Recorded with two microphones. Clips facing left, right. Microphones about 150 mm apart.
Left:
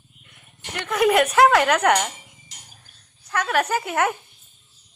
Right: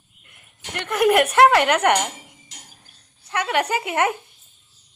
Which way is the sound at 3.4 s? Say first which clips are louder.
Even; 10° right (ahead or behind).